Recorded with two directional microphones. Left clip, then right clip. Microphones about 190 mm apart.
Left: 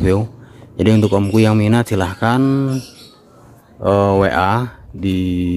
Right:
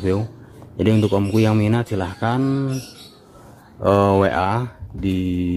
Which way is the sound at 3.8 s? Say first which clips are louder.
Left 2 dB; centre (ahead or behind).